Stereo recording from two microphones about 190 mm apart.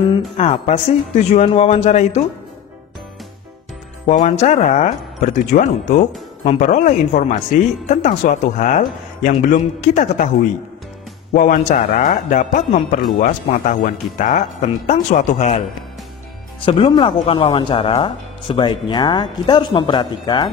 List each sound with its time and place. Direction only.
0.1 s speech: 30° left (ahead or behind)
4.1 s speech: 40° left (ahead or behind)
11.3 s speech: 40° left (ahead or behind)
16.6 s speech: 25° left (ahead or behind)